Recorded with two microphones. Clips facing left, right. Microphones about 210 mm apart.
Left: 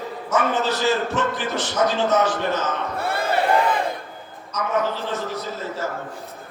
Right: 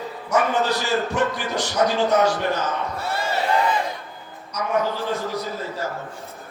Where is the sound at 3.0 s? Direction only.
55° left (ahead or behind).